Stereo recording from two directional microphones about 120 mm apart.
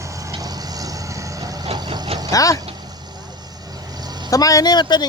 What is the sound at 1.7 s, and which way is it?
Vehicle, 35° right (ahead or behind).